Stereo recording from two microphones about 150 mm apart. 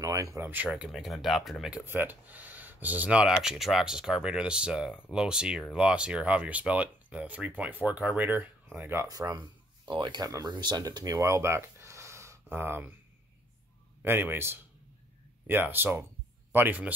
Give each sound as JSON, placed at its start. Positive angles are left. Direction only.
{"t": 0.0, "sound": "speech", "side_deg": -20}
{"t": 1.9, "sound": "speech", "side_deg": -15}
{"t": 14.0, "sound": "speech", "side_deg": -15}